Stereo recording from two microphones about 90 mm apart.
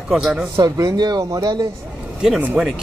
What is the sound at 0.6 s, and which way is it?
Speech, 45° right (ahead or behind).